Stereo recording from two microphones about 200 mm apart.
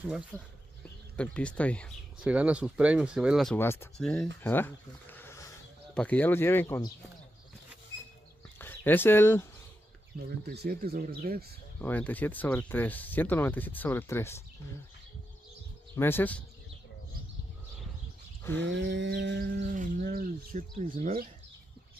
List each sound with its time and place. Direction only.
0.0 s speech: 5° right (ahead or behind)
1.1 s speech: 5° left (ahead or behind)
3.5 s speech: 10° left (ahead or behind)
8.5 s speech: 10° left (ahead or behind)
10.4 s speech: 55° right (ahead or behind)
11.8 s speech: 10° left (ahead or behind)
16.0 s speech: 10° left (ahead or behind)
18.4 s a sound: 10° left (ahead or behind)
18.7 s a sound: 60° right (ahead or behind)
19.7 s speech: 45° right (ahead or behind)